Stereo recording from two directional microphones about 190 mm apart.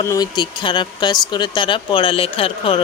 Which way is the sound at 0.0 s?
20° left (ahead or behind).